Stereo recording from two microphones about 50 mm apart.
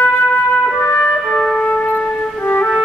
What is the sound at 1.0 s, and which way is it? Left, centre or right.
Music, left.